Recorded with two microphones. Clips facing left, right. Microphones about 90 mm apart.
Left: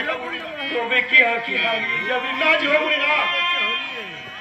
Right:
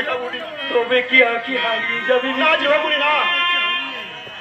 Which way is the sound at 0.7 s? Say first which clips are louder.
Right 5 dB; 45° right (ahead or behind).